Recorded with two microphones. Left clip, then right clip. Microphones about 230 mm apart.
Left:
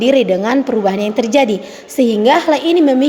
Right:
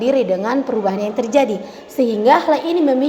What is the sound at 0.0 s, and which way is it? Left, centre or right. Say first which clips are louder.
A woman's voice: left 4 dB; left.